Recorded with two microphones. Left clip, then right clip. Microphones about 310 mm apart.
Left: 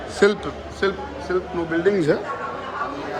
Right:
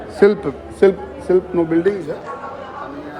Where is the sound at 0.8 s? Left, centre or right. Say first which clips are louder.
Right 9 dB; centre.